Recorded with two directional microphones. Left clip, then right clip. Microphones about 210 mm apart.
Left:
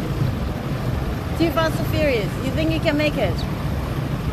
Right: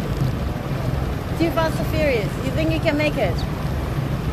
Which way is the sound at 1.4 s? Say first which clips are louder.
Left 1 dB; 25° left (ahead or behind).